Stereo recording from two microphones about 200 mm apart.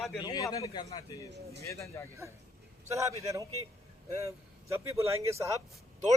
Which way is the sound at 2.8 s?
15° right (ahead or behind).